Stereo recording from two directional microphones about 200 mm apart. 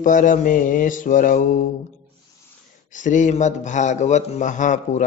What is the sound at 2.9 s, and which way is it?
Mantra, 40° left (ahead or behind).